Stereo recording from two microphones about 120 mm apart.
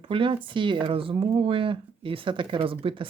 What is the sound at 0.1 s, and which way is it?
Speech, 45° right (ahead or behind).